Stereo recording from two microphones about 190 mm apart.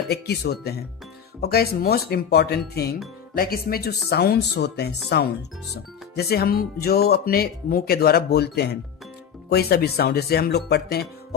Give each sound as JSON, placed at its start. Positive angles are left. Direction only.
{"t": 0.1, "sound": "speech", "side_deg": 60}